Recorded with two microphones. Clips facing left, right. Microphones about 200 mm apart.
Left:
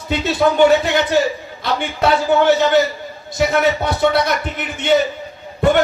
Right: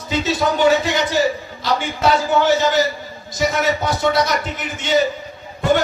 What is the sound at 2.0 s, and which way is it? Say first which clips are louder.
A man's voice: left 3 dB; 60° left (ahead or behind).